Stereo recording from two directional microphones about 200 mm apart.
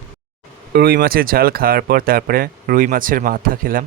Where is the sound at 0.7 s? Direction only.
50° right (ahead or behind).